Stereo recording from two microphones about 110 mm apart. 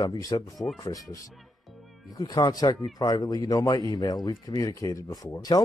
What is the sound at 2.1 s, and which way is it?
Speech, 35° left (ahead or behind).